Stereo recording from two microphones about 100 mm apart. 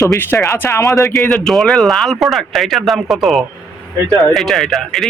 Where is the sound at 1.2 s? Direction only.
5° left (ahead or behind).